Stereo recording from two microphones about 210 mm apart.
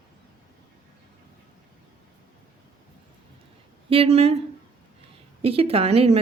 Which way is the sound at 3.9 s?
30° right (ahead or behind).